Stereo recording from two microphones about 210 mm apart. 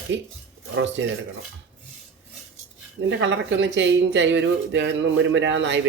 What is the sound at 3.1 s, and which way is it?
Speech, 55° right (ahead or behind).